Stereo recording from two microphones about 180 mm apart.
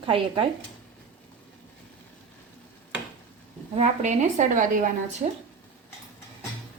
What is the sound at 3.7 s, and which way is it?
A woman's voice, 40° right (ahead or behind).